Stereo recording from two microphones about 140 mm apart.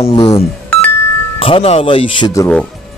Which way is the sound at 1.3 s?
40° left (ahead or behind).